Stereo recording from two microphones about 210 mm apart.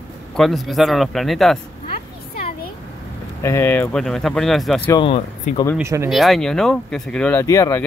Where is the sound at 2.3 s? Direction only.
45° left (ahead or behind).